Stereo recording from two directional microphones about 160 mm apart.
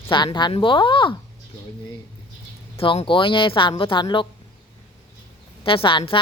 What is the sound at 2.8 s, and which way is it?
Speech, 35° left (ahead or behind).